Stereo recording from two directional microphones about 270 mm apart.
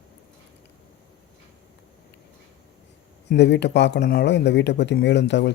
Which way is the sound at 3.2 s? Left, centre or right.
Left.